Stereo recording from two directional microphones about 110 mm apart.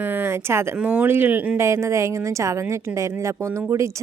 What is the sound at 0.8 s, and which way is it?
Speech, 10° right (ahead or behind).